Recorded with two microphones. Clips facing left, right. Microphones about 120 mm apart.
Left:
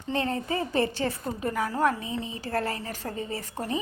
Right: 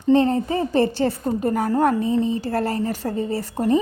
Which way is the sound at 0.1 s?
30° right (ahead or behind).